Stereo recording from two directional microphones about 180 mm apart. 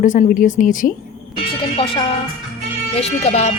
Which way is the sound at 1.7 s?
30° left (ahead or behind).